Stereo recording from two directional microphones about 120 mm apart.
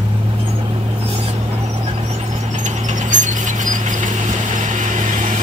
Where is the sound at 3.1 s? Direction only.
90° right.